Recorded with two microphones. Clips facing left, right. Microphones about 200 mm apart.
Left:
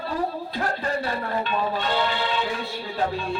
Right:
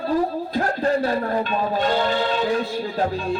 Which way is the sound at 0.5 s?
45° right (ahead or behind).